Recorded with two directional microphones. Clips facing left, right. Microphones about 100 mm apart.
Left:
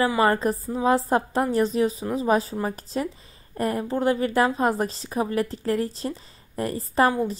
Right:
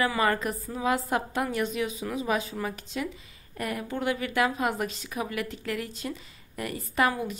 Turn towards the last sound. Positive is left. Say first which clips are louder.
# left 5 dB
turn(degrees=35)  # may be behind; listen again after turning